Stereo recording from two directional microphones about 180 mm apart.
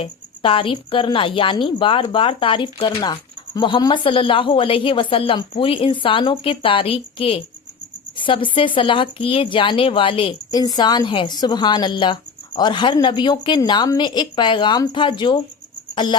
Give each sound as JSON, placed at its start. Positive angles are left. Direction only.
{"t": 0.0, "sound": "a woman's voice", "side_deg": 30}